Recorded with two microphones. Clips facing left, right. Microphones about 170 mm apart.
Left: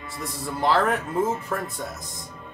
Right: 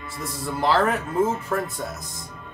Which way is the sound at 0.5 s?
Centre (ahead or behind).